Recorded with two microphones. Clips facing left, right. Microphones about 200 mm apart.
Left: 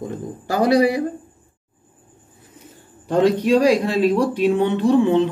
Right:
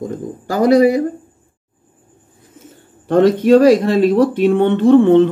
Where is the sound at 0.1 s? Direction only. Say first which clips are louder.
Right 3 dB; 40° right (ahead or behind).